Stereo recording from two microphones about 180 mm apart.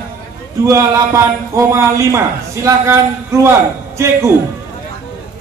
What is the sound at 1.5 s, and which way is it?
Speech, 15° right (ahead or behind).